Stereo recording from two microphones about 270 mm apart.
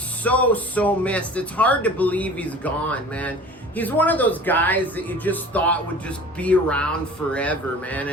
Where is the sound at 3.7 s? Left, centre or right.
Centre.